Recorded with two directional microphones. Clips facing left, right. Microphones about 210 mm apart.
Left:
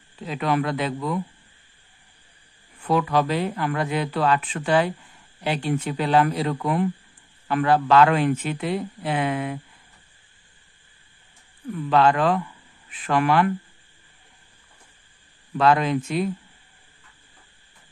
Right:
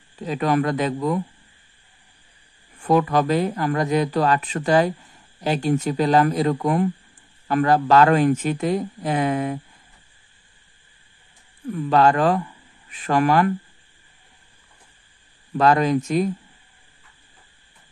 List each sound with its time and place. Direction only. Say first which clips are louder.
0.2 s a man's voice: right 3 dB; 40° right (ahead or behind)
2.8 s a man's voice: right 3 dB; 45° right (ahead or behind)
11.7 s a man's voice: right 2 dB; 40° right (ahead or behind)
15.5 s speech: right 2 dB; 40° right (ahead or behind)